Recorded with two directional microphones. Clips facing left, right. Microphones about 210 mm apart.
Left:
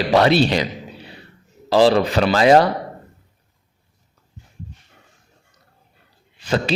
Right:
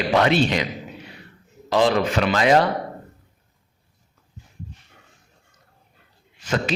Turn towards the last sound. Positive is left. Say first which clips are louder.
# left 3 dB
turn(degrees=30)  # may be behind; listen again after turning